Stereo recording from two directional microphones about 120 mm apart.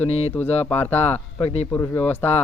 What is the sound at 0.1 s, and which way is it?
Speech, 60° left (ahead or behind).